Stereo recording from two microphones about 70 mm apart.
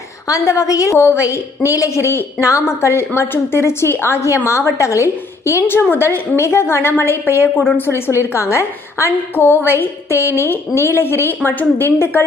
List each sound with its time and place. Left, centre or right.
0.3 s a woman's voice: left
0.9 s a woman's voice: left
1.2 s a woman's voice: left
8.3 s a woman's voice: left
9.3 s a woman's voice: left